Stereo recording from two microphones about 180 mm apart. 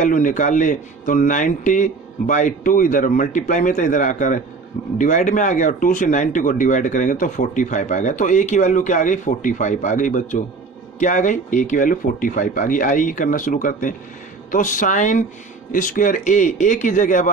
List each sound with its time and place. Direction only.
0.0 s speech: 45° left (ahead or behind)